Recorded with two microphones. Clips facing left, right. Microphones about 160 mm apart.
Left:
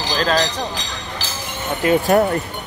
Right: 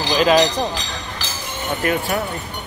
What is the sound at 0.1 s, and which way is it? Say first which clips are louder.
Speech: right 4 dB; 10° right (ahead or behind).